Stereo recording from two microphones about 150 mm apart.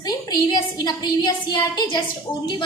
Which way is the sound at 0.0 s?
25° left (ahead or behind).